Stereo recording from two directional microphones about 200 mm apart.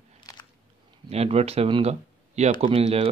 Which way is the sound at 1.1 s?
30° right (ahead or behind).